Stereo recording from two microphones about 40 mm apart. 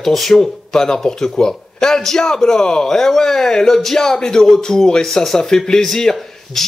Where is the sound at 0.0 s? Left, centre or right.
Centre.